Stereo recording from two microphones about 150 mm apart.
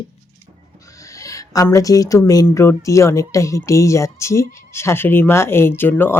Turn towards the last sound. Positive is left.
turn(degrees=15)  # may be behind; listen again after turning